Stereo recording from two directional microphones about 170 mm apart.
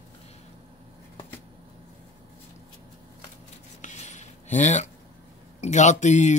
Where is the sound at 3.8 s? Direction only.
45° left (ahead or behind).